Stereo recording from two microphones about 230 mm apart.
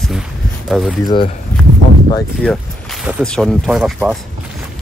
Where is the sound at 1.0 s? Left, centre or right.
Left.